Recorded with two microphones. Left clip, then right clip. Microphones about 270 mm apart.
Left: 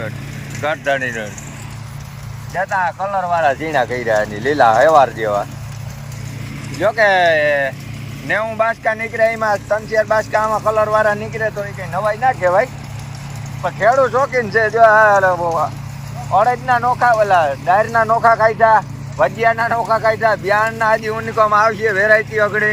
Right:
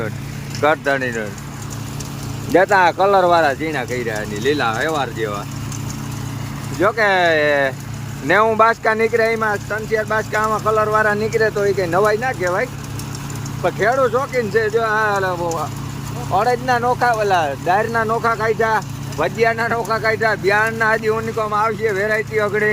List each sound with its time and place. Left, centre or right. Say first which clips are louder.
0.6 s speech: right 1 dB; centre
2.5 s speech: right 5 dB; right; by 5.4 s centre
6.7 s speech: left 2 dB; centre